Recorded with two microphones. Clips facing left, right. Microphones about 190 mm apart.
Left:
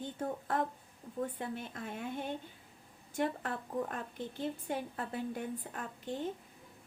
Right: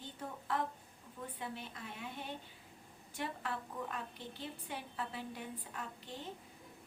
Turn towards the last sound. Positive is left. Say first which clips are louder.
# left 8 dB
turn(degrees=50)  # may be behind; listen again after turning